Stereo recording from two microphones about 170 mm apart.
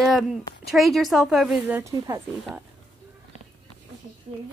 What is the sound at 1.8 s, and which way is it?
Speech, 15° right (ahead or behind).